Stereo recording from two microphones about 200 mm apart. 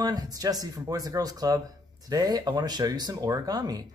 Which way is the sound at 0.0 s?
20° right (ahead or behind).